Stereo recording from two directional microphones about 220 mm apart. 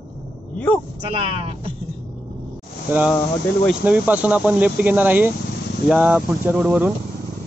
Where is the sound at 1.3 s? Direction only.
25° right (ahead or behind).